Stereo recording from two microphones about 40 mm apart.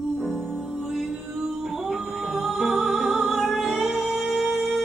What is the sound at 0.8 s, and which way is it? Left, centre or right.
Music, centre.